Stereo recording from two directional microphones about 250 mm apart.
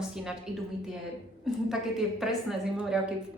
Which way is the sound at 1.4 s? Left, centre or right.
Centre.